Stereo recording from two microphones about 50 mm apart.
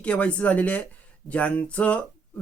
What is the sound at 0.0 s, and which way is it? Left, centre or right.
Speech, left.